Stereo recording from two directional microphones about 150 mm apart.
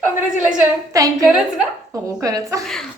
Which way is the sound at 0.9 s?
20° right (ahead or behind).